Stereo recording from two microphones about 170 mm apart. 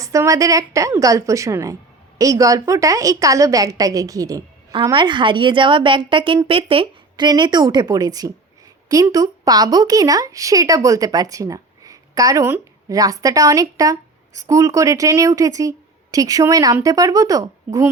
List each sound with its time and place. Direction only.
0.0 s speech: 20° right (ahead or behind)